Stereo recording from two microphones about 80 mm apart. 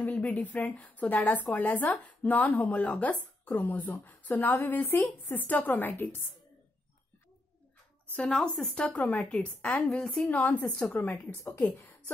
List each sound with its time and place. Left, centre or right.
0.0 s speech: centre
8.2 s a woman's voice: centre
10.2 s speech: centre